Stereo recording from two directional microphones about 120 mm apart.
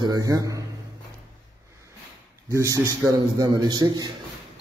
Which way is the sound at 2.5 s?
25° right (ahead or behind).